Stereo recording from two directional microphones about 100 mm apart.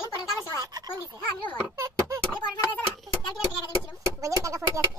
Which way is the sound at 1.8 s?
35° right (ahead or behind).